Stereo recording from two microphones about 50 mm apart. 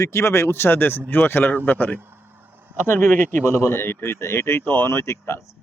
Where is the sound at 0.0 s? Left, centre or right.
Left.